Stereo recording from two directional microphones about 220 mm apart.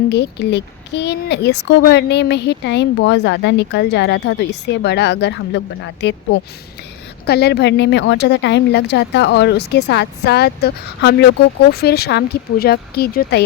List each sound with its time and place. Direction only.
0.1 s speech: 50° left (ahead or behind)